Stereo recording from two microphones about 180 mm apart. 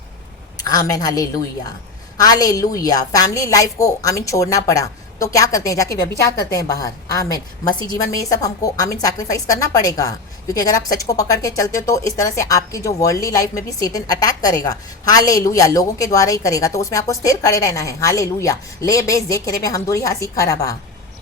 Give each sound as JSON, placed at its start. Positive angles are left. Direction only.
{"t": 0.6, "sound": "a woman's voice", "side_deg": 20}